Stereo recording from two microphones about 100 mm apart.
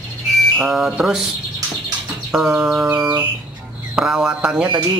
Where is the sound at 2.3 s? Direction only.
5° right (ahead or behind).